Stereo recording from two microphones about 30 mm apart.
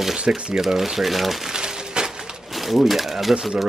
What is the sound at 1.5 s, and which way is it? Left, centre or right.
Crumpling, right.